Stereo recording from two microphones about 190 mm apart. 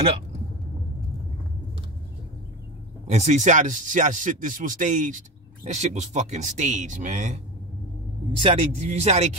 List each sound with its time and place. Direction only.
3.1 s speech: 35° right (ahead or behind)
8.4 s speech: 35° right (ahead or behind)